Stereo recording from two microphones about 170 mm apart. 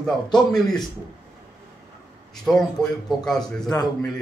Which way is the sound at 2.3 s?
5° left (ahead or behind).